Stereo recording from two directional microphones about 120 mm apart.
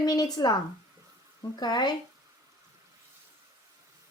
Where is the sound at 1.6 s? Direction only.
35° left (ahead or behind).